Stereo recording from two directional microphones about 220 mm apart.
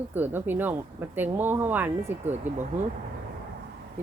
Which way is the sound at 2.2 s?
30° right (ahead or behind).